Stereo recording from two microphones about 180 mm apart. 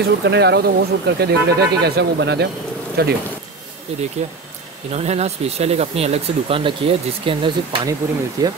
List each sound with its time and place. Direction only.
0.0 s speech: 70° right (ahead or behind)
3.0 s speech: 60° right (ahead or behind)
4.2 s speech: 40° right (ahead or behind); by 8.5 s 20° right (ahead or behind)